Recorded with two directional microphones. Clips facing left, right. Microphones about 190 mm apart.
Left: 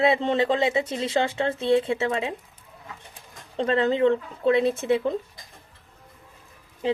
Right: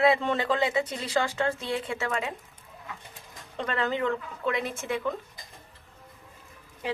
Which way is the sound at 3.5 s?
30° left (ahead or behind).